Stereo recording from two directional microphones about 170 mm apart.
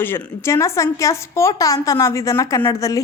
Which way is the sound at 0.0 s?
10° left (ahead or behind).